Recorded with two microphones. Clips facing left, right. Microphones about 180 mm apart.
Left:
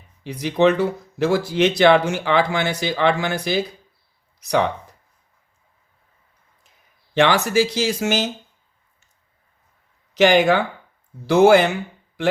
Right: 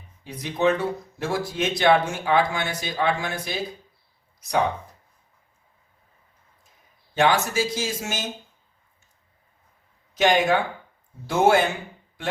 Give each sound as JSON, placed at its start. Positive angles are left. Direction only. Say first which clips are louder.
{"t": 0.3, "sound": "speech", "louder": "left 5 dB", "side_deg": 70}
{"t": 7.1, "sound": "speech", "louder": "left 4 dB", "side_deg": 75}
{"t": 10.2, "sound": "speech", "louder": "left 5 dB", "side_deg": 80}